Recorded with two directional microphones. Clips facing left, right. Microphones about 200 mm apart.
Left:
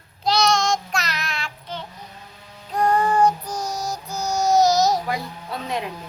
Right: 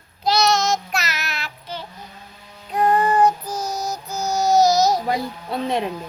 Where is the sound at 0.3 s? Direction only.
Centre (ahead or behind).